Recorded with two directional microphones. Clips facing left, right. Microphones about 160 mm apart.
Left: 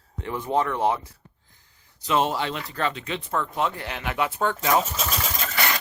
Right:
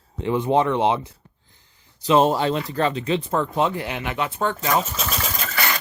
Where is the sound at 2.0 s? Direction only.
35° right (ahead or behind).